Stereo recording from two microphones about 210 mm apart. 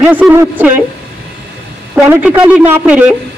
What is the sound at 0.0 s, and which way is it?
Speech, 5° right (ahead or behind).